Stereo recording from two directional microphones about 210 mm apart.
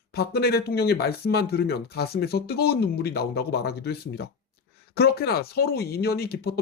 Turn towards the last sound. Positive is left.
turn(degrees=50)  # may be behind; listen again after turning